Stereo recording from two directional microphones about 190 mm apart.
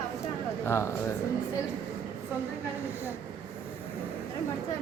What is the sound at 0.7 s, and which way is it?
Speech, 15° left (ahead or behind).